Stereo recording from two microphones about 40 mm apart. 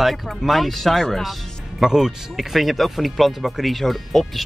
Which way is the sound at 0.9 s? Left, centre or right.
Centre.